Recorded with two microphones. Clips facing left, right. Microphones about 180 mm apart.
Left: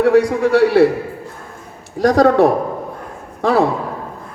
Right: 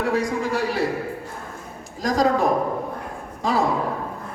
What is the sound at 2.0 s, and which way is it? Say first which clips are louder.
A man's voice: left 9 dB; 70° left (ahead or behind).